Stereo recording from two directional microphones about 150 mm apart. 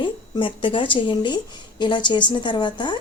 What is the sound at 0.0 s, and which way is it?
A woman's voice, 35° left (ahead or behind).